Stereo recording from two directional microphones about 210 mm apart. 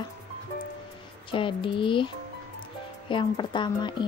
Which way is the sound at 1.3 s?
25° left (ahead or behind).